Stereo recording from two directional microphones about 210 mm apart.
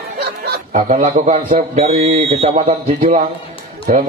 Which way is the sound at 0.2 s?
40° right (ahead or behind).